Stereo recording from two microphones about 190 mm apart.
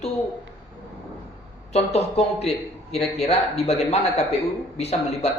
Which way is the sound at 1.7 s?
35° left (ahead or behind).